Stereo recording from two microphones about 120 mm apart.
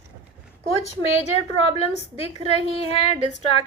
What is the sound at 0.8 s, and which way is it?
A woman's voice, 60° left (ahead or behind).